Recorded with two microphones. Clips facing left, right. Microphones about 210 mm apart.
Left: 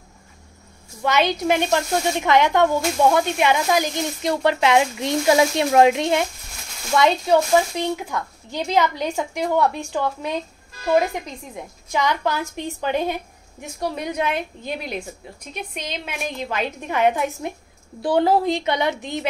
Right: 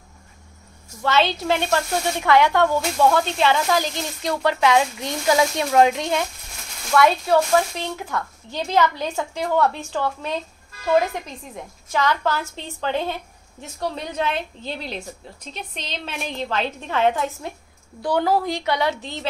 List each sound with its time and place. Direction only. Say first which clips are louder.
1.0 s a woman's voice: left 1 dB; 15° left (ahead or behind)